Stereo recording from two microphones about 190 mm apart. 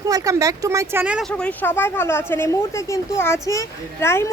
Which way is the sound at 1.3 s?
5° left (ahead or behind).